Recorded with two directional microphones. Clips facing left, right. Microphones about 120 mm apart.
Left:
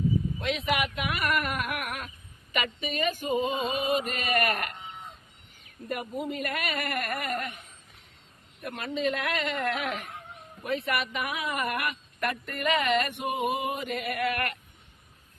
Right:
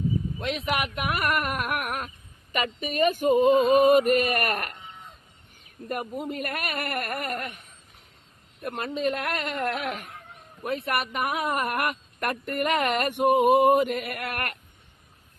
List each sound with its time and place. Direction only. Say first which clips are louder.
0.4 s speech: right 1 dB; 45° right (ahead or behind)
5.9 s speech: right 1 dB; 45° right (ahead or behind)
8.6 s speech: right 2 dB; 45° right (ahead or behind)